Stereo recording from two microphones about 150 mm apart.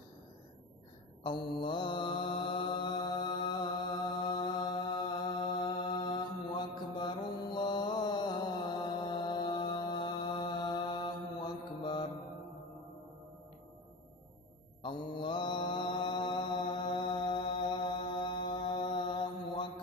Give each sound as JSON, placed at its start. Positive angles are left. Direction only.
{"t": 1.2, "sound": "mantra", "side_deg": 30}
{"t": 14.8, "sound": "mantra", "side_deg": 30}